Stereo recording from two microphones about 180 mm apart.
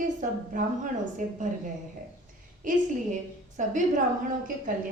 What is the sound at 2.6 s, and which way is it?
A woman's voice, 45° right (ahead or behind).